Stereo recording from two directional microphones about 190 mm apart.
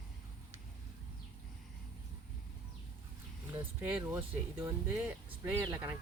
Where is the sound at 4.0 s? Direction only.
15° right (ahead or behind).